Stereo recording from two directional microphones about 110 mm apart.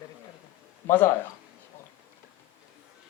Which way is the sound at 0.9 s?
20° left (ahead or behind).